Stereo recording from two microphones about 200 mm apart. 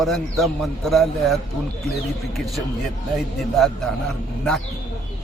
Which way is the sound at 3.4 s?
Centre (ahead or behind).